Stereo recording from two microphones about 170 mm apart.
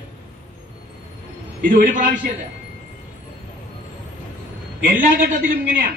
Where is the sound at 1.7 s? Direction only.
50° right (ahead or behind).